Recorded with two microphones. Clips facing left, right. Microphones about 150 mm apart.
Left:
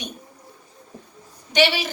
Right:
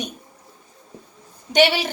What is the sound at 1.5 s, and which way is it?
Speech, 50° right (ahead or behind).